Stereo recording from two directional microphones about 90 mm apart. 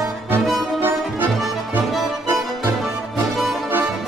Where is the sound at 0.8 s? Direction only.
20° right (ahead or behind).